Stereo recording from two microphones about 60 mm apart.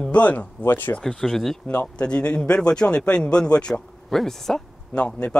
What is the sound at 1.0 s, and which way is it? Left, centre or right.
Speech, centre.